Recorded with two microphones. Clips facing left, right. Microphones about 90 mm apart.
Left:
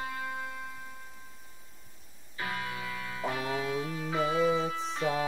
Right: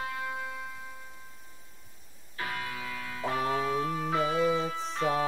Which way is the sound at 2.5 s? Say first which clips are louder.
Left 1 dB; 10° left (ahead or behind).